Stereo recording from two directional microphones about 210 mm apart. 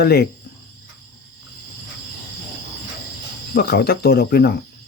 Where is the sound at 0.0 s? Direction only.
50° left (ahead or behind).